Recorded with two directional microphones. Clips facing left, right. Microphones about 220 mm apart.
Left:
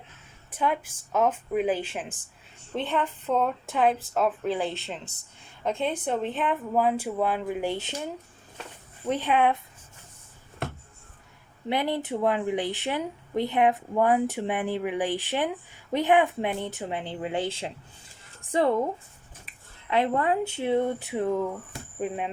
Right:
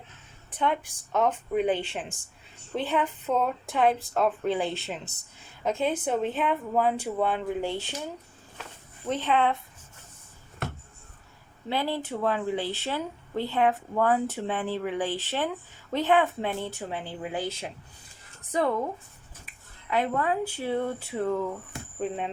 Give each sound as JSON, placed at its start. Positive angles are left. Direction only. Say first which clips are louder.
{"t": 0.5, "sound": "speech", "louder": "even", "side_deg": 5}
{"t": 11.7, "sound": "speech", "louder": "left 2 dB", "side_deg": 15}
{"t": 19.9, "sound": "speech", "louder": "left 2 dB", "side_deg": 25}